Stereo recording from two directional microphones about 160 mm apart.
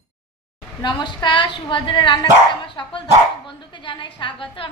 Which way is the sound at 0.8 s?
30° left (ahead or behind).